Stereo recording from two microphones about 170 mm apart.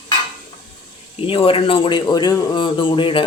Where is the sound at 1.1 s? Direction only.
30° left (ahead or behind).